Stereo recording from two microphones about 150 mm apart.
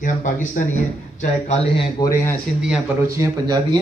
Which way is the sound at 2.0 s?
25° left (ahead or behind).